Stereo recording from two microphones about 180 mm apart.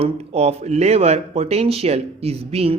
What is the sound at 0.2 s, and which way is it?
Speech, 35° right (ahead or behind).